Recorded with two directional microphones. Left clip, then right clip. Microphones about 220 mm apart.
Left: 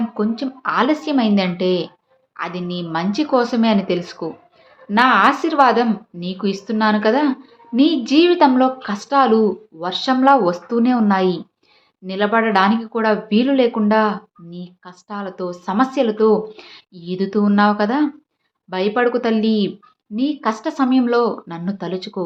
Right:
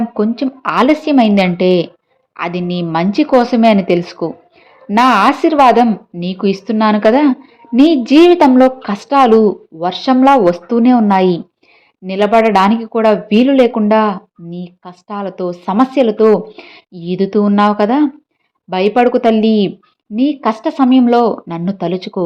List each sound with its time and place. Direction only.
0.1 s speech: 25° right (ahead or behind)